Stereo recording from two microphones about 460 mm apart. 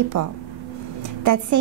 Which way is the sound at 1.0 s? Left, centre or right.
Right.